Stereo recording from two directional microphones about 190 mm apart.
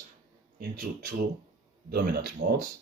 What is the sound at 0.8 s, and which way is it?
Speech, 45° right (ahead or behind).